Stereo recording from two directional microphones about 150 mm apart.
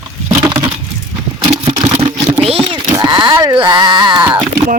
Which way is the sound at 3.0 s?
30° right (ahead or behind).